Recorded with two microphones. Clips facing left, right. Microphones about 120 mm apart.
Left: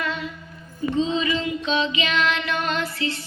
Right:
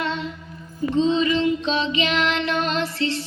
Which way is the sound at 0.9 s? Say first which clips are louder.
Right 4 dB; 5° left (ahead or behind).